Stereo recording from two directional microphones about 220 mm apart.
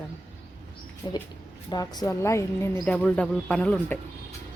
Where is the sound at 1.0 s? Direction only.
20° left (ahead or behind).